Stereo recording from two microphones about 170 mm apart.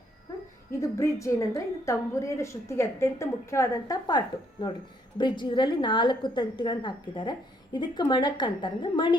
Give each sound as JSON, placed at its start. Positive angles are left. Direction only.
{"t": 0.7, "sound": "a woman's voice", "side_deg": 20}